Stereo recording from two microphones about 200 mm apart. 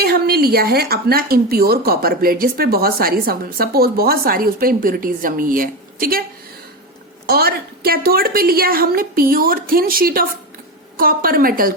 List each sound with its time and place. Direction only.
0.0 s speech: 50° right (ahead or behind)
7.3 s speech: 50° right (ahead or behind)